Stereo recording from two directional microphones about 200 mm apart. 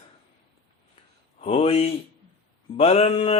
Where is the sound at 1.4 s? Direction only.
25° left (ahead or behind).